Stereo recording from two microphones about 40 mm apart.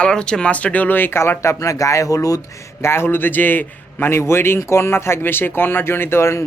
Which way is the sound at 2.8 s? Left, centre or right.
Left.